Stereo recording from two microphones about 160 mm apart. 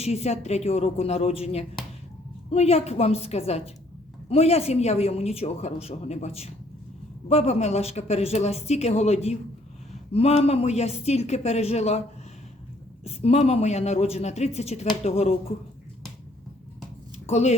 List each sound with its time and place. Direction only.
0.0 s speech: 40° left (ahead or behind)
13.1 s speech: 40° left (ahead or behind)
17.2 s speech: 45° left (ahead or behind)